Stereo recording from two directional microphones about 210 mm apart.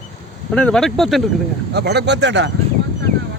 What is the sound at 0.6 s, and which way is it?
Speech, 5° left (ahead or behind).